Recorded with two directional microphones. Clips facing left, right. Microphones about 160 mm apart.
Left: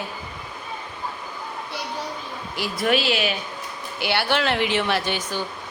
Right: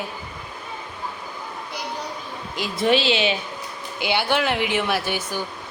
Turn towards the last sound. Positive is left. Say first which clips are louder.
# even
turn(degrees=-10)  # may be behind; listen again after turning